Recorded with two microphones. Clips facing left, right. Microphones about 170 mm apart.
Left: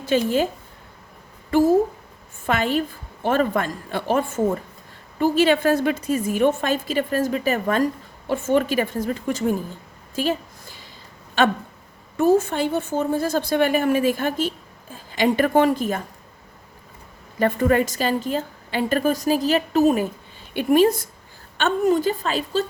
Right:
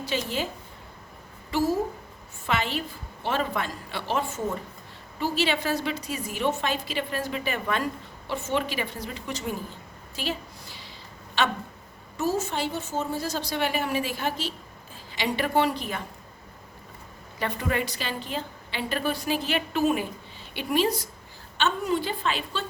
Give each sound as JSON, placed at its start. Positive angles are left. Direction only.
{"t": 0.0, "sound": "a woman's voice", "side_deg": 50}
{"t": 1.5, "sound": "a woman's voice", "side_deg": 50}
{"t": 10.2, "sound": "a sound", "side_deg": 45}
{"t": 11.4, "sound": "a woman's voice", "side_deg": 50}
{"t": 17.4, "sound": "a woman's voice", "side_deg": 45}